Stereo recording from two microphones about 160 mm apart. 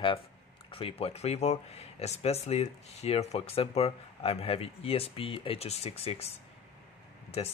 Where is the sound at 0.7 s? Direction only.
35° left (ahead or behind).